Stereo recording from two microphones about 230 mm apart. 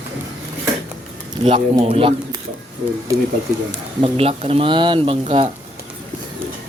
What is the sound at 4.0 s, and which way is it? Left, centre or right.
Speech, right.